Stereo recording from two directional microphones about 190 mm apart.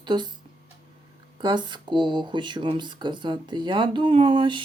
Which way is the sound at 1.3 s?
25° right (ahead or behind).